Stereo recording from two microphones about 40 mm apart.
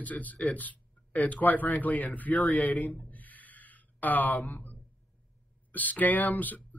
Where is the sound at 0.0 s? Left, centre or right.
Left.